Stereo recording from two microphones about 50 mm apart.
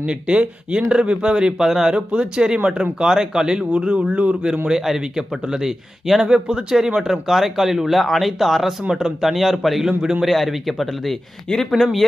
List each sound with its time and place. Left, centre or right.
0.0 s speech: right
1.6 s speech: centre
2.0 s speech: centre
4.6 s speech: centre
6.2 s speech: centre